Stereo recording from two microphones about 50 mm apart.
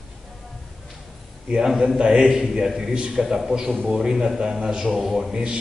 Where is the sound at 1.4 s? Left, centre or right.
Centre.